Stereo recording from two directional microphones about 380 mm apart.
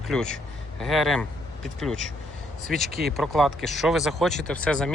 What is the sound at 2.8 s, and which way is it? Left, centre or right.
Speech, right.